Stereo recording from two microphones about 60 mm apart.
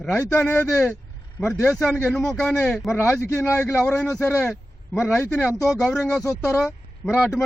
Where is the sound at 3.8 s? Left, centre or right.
Centre.